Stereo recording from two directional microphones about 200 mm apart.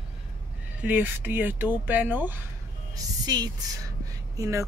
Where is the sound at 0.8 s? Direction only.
10° right (ahead or behind).